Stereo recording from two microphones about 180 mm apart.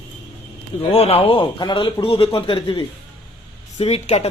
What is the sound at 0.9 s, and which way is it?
A man's voice, 35° left (ahead or behind).